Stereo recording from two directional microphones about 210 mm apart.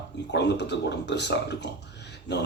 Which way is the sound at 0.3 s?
55° left (ahead or behind).